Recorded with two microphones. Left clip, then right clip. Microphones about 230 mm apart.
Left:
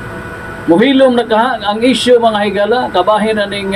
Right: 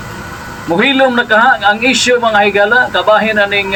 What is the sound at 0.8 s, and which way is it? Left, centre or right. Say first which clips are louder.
A man's voice: even; right.